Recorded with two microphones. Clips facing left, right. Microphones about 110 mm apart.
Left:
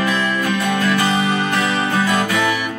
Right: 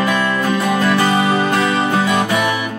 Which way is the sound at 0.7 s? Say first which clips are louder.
Right 3 dB; 30° right (ahead or behind).